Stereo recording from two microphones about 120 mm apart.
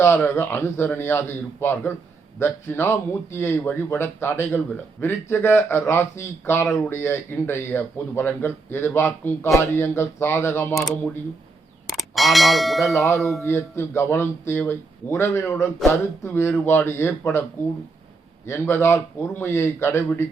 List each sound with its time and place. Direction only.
0.0 s speech: 20° left (ahead or behind)
11.9 s speech: centre (ahead or behind)
13.1 s music: centre (ahead or behind)
13.4 s speech: 20° left (ahead or behind)
18.4 s speech: 20° left (ahead or behind)